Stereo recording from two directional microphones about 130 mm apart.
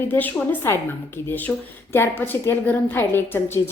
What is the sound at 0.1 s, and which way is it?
A woman's voice, 15° left (ahead or behind).